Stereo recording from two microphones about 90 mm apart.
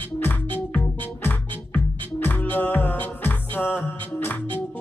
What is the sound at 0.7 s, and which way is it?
Music, 20° left (ahead or behind).